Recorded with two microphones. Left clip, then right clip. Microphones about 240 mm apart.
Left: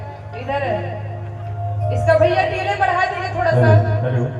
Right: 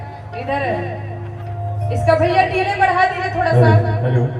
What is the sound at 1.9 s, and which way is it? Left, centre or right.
A woman's voice, right.